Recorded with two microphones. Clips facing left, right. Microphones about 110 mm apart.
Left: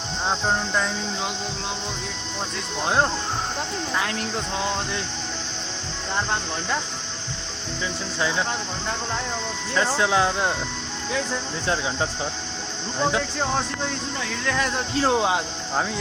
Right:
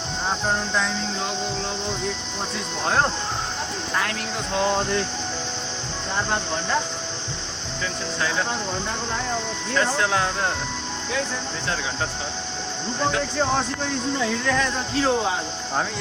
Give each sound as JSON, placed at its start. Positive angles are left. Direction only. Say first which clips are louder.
{"t": 0.4, "sound": "speech", "louder": "even", "side_deg": 5}
{"t": 9.7, "sound": "speech", "louder": "left 1 dB", "side_deg": 15}
{"t": 14.5, "sound": "speech", "louder": "right 1 dB", "side_deg": 5}